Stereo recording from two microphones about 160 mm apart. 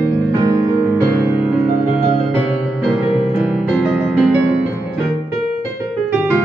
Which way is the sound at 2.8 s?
Centre (ahead or behind).